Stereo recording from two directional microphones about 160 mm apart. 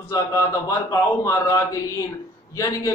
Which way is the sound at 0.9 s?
20° left (ahead or behind).